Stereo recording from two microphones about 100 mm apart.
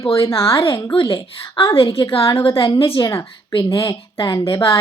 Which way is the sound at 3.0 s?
35° left (ahead or behind).